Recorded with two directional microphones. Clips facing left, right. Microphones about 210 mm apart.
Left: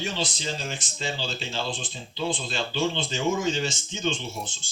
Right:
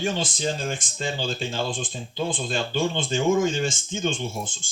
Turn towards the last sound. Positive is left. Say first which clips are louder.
# right 4 dB
turn(degrees=-50)  # may be behind; listen again after turning